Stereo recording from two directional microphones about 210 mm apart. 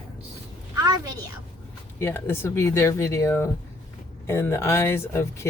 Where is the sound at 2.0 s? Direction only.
10° left (ahead or behind).